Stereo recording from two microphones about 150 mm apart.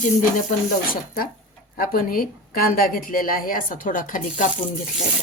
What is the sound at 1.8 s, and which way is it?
A woman's voice, 75° left (ahead or behind).